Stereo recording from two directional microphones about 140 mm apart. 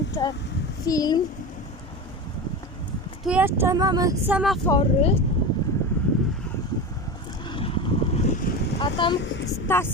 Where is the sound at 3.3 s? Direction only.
15° right (ahead or behind).